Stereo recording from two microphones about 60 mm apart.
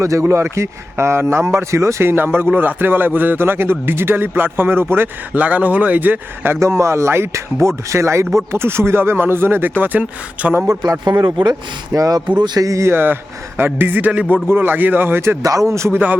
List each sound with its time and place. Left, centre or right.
0.0 s a man's voice: right
6.6 s a man's voice: right
11.1 s speech: right
12.5 s speech: right
12.9 s a man's voice: right
15.4 s speech: right